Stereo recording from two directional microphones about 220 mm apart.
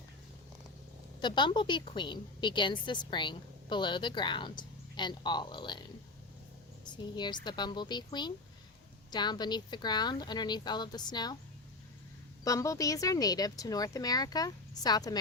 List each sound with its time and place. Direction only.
1.2 s a woman's voice: 20° left (ahead or behind)
6.8 s a woman's voice: 20° left (ahead or behind)
12.5 s speech: 15° left (ahead or behind)